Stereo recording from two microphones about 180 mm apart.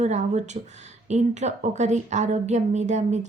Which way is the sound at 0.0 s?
40° right (ahead or behind).